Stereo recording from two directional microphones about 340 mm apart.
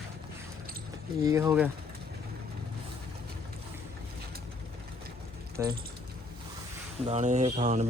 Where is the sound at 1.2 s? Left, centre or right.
Centre.